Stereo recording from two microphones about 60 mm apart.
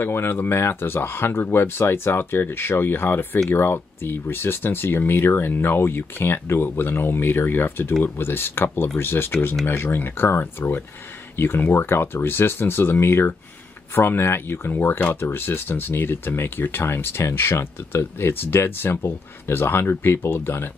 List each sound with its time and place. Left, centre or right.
0.0 s speech: left